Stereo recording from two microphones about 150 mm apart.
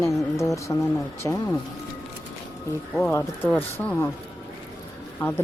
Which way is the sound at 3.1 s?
15° left (ahead or behind).